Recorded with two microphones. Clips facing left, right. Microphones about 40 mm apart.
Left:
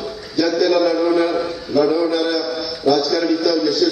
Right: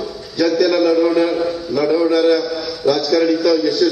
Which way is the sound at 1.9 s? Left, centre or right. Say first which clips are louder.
Right 4 dB; right.